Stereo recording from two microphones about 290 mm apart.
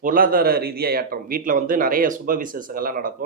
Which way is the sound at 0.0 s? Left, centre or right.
Right.